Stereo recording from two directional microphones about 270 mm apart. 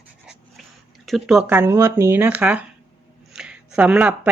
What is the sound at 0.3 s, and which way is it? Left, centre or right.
Speech, centre.